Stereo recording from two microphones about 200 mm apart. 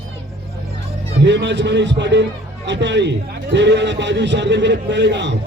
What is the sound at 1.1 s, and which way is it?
A man's voice, 65° right (ahead or behind).